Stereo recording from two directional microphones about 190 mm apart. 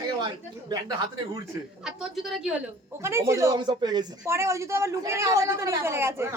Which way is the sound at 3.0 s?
15° right (ahead or behind).